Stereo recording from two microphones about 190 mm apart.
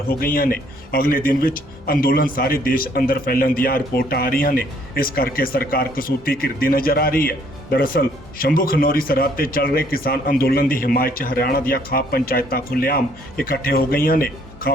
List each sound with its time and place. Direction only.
0.1 s speech: 50° left (ahead or behind)